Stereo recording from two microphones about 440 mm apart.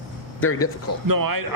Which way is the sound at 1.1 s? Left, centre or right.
Right.